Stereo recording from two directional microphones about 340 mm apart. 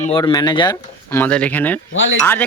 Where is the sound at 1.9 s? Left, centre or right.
Left.